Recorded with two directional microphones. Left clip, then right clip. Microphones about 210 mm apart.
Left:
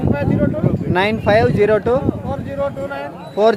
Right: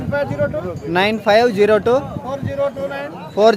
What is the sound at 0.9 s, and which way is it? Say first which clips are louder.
Speech: right 1 dB; centre (ahead or behind).